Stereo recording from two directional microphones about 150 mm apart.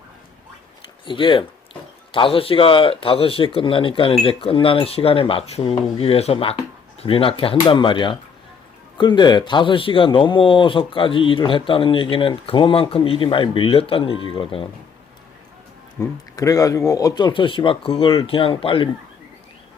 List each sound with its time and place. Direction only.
1.0 s speech: 35° left (ahead or behind)
16.0 s speech: 25° left (ahead or behind)